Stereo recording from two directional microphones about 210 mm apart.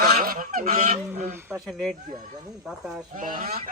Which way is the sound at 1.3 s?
10° right (ahead or behind).